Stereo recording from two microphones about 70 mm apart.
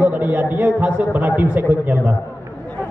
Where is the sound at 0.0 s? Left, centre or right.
Right.